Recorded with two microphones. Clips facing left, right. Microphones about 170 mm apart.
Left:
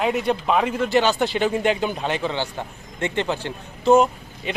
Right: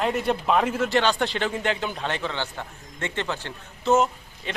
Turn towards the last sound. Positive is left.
turn(degrees=15)  # may be behind; listen again after turning